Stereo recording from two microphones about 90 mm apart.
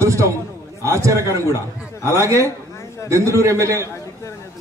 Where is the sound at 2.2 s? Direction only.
35° right (ahead or behind).